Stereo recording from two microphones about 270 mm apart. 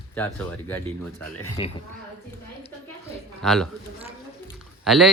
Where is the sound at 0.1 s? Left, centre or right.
Centre.